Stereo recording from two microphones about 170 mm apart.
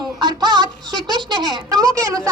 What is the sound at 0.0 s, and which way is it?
Music, 25° right (ahead or behind).